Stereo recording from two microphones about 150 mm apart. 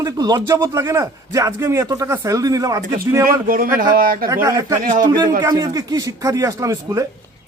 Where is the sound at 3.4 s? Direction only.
70° right (ahead or behind).